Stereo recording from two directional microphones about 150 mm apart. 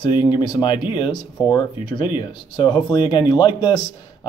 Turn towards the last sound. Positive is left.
turn(degrees=30)  # may be behind; listen again after turning